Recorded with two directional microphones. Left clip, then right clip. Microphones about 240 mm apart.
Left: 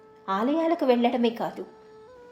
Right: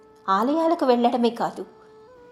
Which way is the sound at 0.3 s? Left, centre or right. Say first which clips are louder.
Right 4 dB; right.